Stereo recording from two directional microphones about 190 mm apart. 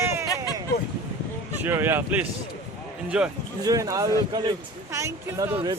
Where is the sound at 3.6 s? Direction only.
15° right (ahead or behind).